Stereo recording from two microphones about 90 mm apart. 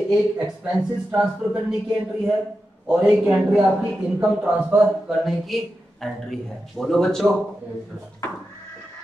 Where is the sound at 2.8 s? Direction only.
10° right (ahead or behind).